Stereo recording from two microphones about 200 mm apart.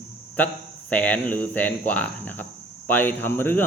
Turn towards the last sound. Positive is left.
turn(degrees=10)  # may be behind; listen again after turning